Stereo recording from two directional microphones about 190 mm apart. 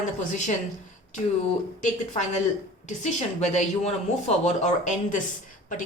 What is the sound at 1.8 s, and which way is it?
A woman's voice, 40° left (ahead or behind).